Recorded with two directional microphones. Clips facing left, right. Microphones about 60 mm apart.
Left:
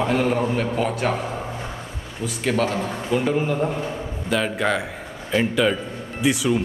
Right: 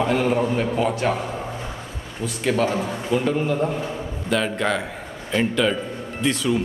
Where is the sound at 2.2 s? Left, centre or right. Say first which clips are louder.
Right 1 dB; centre.